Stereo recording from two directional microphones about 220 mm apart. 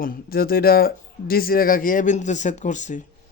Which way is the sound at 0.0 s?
40° left (ahead or behind).